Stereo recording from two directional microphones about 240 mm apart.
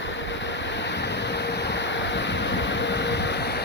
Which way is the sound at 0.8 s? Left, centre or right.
Left.